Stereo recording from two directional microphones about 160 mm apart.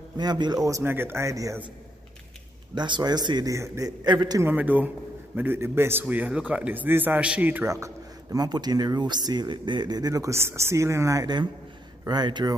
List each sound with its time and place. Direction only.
0.2 s a man's voice: 25° right (ahead or behind)
2.7 s a man's voice: 30° right (ahead or behind)
4.4 s a man's voice: 10° right (ahead or behind)